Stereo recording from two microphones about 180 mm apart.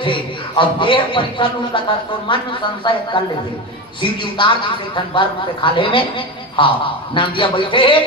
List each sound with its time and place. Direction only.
0.0 s a man's voice: 25° left (ahead or behind)